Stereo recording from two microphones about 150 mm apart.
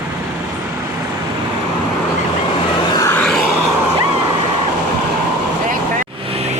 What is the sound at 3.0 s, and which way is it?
Vehicle, 15° left (ahead or behind).